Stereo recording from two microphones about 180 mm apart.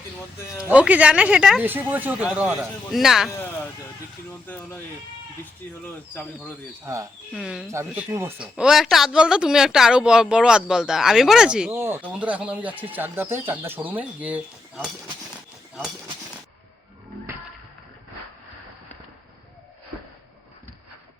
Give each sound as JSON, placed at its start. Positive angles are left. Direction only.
{"t": 0.7, "sound": "speech", "side_deg": -5}
{"t": 4.4, "sound": "speech", "side_deg": 10}
{"t": 5.8, "sound": "speech", "side_deg": 10}
{"t": 6.8, "sound": "speech", "side_deg": -20}
{"t": 7.3, "sound": "speech", "side_deg": 0}
{"t": 7.7, "sound": "speech", "side_deg": -15}